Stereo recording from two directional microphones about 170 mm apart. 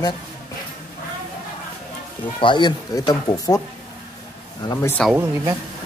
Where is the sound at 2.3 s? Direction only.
30° left (ahead or behind).